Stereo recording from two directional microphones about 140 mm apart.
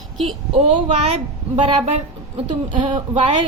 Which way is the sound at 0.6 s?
40° right (ahead or behind).